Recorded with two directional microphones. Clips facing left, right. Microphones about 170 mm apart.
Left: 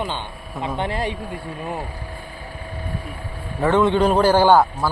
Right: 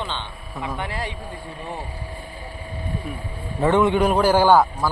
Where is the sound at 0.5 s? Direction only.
25° left (ahead or behind).